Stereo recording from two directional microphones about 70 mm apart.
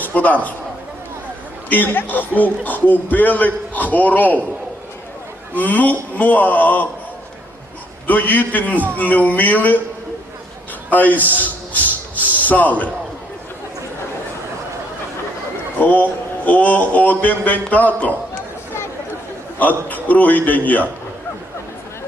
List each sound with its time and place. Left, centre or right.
0.0 s a sound: left
1.7 s a man's voice: left
5.5 s a man's voice: left
8.0 s a man's voice: left
10.9 s a sound: left
15.8 s a man's voice: left
19.5 s a man's voice: left